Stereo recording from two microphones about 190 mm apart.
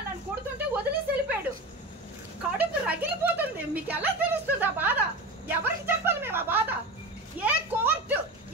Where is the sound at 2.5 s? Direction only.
10° right (ahead or behind).